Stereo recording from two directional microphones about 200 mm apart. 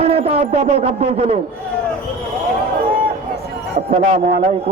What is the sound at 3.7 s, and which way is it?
Speech, 30° right (ahead or behind).